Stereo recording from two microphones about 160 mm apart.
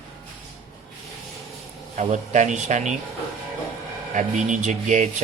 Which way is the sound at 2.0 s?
50° right (ahead or behind).